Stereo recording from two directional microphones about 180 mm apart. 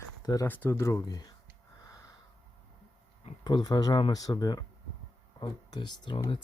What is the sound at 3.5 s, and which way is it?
Speech, 25° left (ahead or behind).